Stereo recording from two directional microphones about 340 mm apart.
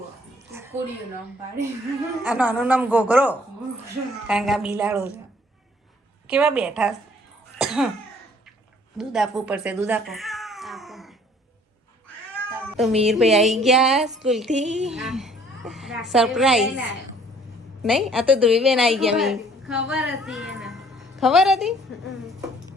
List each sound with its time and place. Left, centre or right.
0.5 s a sound: centre
2.2 s a woman's voice: centre
6.2 s a woman's voice: centre
7.6 s cough: centre
9.0 s speech: centre
12.7 s a woman's voice: centre
14.5 s speech: right
14.8 s a woman's voice: centre
17.9 s a woman's voice: centre